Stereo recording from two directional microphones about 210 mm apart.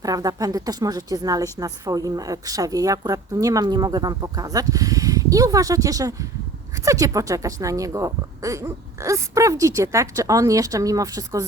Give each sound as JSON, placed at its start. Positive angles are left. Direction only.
{"t": 0.0, "sound": "a woman's voice", "side_deg": -15}